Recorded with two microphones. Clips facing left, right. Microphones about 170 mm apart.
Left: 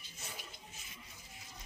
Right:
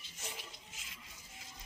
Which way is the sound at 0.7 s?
90° right.